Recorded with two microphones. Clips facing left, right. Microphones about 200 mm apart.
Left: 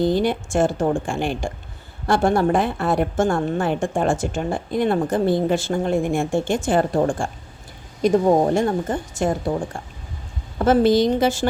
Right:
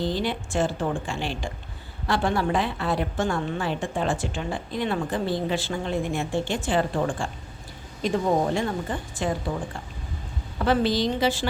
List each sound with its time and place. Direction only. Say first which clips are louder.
0.1 s a woman's voice: left 7 dB; 50° left (ahead or behind)